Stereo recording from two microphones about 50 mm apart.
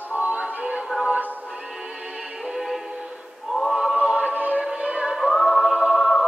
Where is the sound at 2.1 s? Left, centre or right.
Centre.